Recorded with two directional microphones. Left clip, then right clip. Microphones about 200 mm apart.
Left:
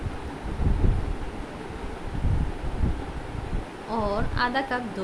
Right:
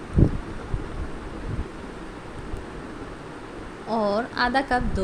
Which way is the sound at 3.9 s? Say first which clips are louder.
Right 4 dB; 25° right (ahead or behind).